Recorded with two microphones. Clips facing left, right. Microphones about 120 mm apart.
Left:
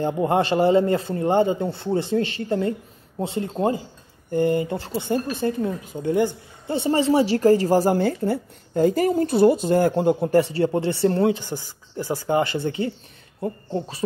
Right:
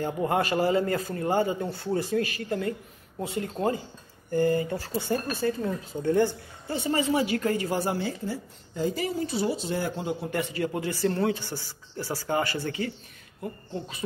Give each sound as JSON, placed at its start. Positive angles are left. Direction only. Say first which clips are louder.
{"t": 0.0, "sound": "speech", "louder": "left 5 dB", "side_deg": 25}
{"t": 6.7, "sound": "a woman's voice", "louder": "left 6 dB", "side_deg": 30}
{"t": 10.3, "sound": "speech", "louder": "left 10 dB", "side_deg": 30}
{"t": 11.3, "sound": "speech", "louder": "left 5 dB", "side_deg": 20}
{"t": 13.4, "sound": "speech", "louder": "left 8 dB", "side_deg": 35}